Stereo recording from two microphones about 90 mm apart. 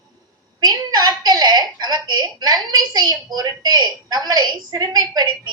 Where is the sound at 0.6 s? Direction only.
50° right (ahead or behind).